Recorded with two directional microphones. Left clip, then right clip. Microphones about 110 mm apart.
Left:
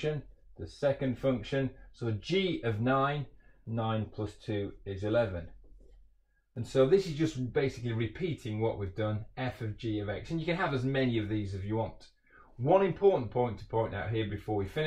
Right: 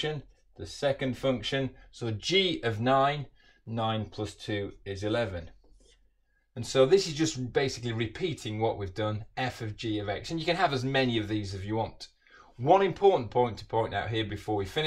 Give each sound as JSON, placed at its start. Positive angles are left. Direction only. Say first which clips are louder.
{"t": 0.6, "sound": "speech", "louder": "right 1 dB", "side_deg": -20}
{"t": 6.5, "sound": "speech", "louder": "right 3 dB", "side_deg": -20}